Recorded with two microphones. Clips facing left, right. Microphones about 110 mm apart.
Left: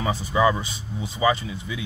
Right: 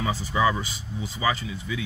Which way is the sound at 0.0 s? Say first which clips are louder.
Left 3 dB; 20° left (ahead or behind).